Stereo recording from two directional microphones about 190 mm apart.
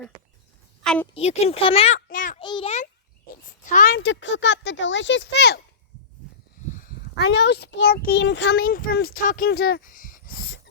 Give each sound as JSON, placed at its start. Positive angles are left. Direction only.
{"t": 0.8, "sound": "a woman's voice", "side_deg": 5}
{"t": 1.1, "sound": "speech", "side_deg": 35}
{"t": 2.0, "sound": "a child's voice", "side_deg": 45}
{"t": 2.4, "sound": "a child's voice", "side_deg": 25}
{"t": 3.7, "sound": "speech", "side_deg": 45}
{"t": 4.0, "sound": "speech", "side_deg": 70}
{"t": 7.3, "sound": "a child's voice", "side_deg": 65}
{"t": 9.5, "sound": "a sound", "side_deg": 55}